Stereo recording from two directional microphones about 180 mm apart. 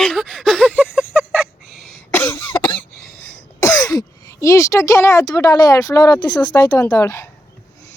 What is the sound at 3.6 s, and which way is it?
Speech, 20° left (ahead or behind).